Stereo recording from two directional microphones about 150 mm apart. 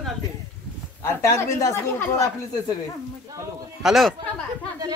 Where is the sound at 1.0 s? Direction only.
20° left (ahead or behind).